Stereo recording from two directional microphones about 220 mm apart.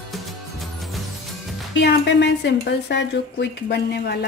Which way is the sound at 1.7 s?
50° left (ahead or behind).